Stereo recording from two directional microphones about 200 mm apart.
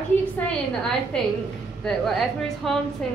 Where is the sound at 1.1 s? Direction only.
5° left (ahead or behind).